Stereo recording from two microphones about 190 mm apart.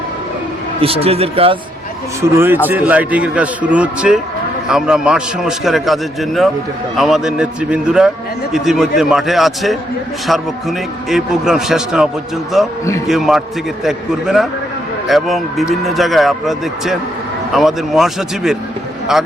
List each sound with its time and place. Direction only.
0.8 s speech: 30° right (ahead or behind)
2.3 s a man's voice: 10° right (ahead or behind)